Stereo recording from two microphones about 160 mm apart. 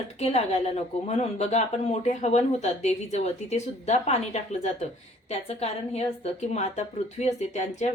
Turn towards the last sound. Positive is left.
turn(degrees=45)  # may be behind; listen again after turning